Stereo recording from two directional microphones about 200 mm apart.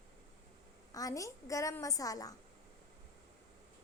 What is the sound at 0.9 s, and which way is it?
A woman's voice, 15° left (ahead or behind).